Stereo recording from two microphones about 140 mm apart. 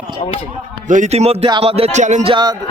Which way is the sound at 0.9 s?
60° right (ahead or behind).